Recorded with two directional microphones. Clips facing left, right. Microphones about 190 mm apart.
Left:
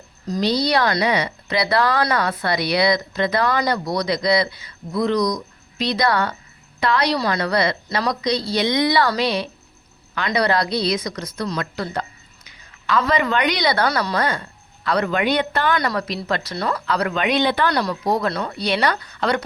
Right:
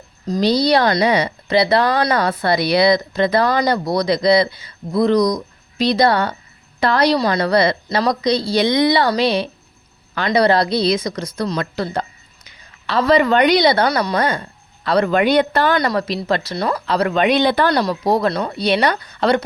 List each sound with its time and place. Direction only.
0.3 s a woman's voice: 30° right (ahead or behind)
15.8 s speech: 25° right (ahead or behind)